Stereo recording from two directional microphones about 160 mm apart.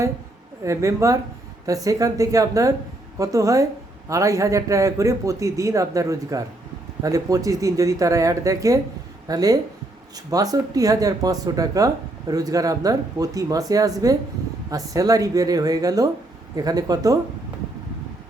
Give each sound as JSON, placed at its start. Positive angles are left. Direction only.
{"t": 0.6, "sound": "a man's voice", "side_deg": -20}